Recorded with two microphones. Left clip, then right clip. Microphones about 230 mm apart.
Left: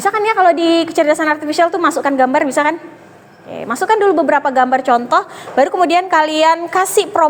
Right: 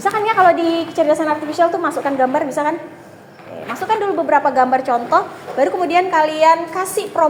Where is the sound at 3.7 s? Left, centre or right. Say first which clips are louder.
Left 6 dB; left.